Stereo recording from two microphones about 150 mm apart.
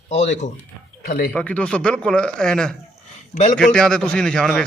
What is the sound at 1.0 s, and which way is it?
Speech, 90° left.